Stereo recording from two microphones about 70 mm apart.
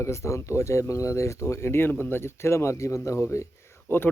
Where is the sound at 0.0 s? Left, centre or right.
Left.